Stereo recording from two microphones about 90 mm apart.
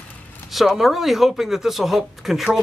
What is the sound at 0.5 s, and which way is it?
Speech, centre (ahead or behind).